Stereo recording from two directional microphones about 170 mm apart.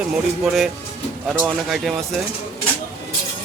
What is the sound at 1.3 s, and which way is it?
Speech, 5° right (ahead or behind).